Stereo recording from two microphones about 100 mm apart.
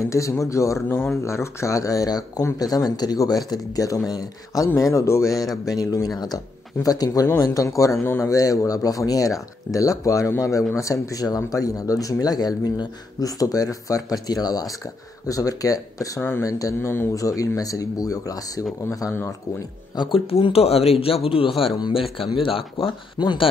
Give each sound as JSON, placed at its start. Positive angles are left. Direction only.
{"t": 0.1, "sound": "speech", "side_deg": 30}
{"t": 16.2, "sound": "speech", "side_deg": 20}
{"t": 16.4, "sound": "speech", "side_deg": 35}
{"t": 16.9, "sound": "speech", "side_deg": 25}
{"t": 17.2, "sound": "speech", "side_deg": 35}
{"t": 20.0, "sound": "speech", "side_deg": 65}
{"t": 23.1, "sound": "speech", "side_deg": 45}